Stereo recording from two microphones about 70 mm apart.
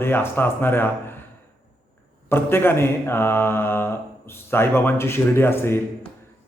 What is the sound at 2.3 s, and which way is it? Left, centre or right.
Speech, left.